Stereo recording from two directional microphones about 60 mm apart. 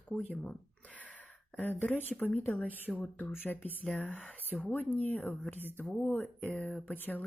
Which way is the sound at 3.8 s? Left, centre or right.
Centre.